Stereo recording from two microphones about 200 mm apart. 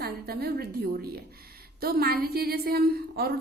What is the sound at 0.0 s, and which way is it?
A woman's voice, 50° right (ahead or behind).